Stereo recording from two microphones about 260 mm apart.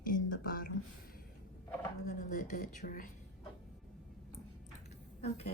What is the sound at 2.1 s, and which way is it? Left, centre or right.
Speech, left.